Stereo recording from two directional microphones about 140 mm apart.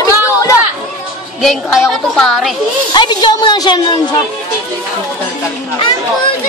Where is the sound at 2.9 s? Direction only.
30° left (ahead or behind).